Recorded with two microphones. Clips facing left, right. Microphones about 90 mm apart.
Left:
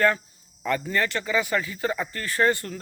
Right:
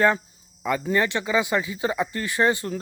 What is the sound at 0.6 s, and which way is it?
Speech, 15° right (ahead or behind).